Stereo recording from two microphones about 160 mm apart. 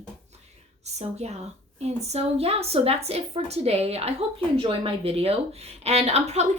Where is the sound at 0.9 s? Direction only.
45° right (ahead or behind).